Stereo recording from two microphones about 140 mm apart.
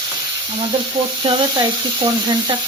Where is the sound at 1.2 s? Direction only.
40° right (ahead or behind).